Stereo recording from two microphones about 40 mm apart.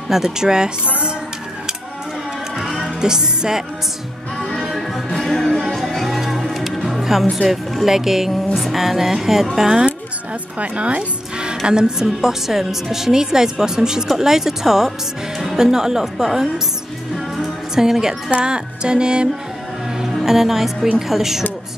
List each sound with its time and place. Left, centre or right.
0.1 s speech: centre
2.5 s music: centre
3.0 s speech: centre
4.6 s music: centre
7.4 s speech: centre
10.6 s a woman's voice: right; by 16.6 s centre
17.4 s music: centre
20.2 s speech: centre